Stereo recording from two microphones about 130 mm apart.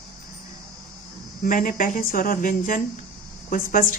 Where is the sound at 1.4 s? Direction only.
90° left.